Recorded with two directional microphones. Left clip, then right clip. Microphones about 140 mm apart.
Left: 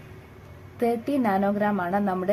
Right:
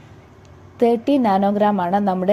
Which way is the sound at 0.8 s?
25° right (ahead or behind).